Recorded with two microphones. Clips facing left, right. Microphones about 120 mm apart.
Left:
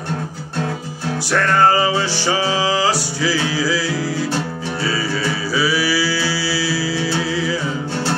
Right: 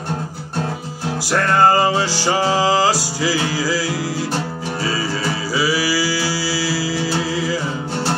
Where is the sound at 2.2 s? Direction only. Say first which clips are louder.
Right 2 dB; 40° right (ahead or behind).